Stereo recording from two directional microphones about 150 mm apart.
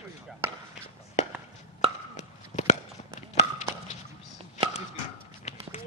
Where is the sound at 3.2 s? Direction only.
50° left (ahead or behind).